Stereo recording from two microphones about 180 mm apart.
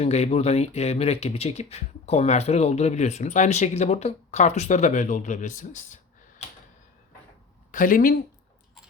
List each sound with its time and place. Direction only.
0.0 s speech: 35° left (ahead or behind)
7.7 s speech: 50° left (ahead or behind)